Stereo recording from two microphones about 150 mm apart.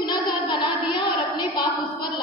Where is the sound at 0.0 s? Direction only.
30° left (ahead or behind).